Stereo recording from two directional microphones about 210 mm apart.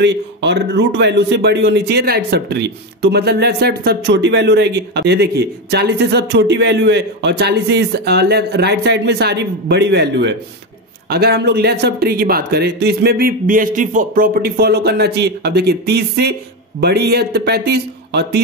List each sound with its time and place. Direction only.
0.0 s a man's voice: 55° right (ahead or behind)